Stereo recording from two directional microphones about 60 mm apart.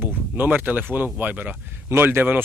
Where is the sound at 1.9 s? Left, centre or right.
Right.